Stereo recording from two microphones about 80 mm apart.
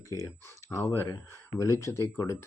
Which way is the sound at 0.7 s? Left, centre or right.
Left.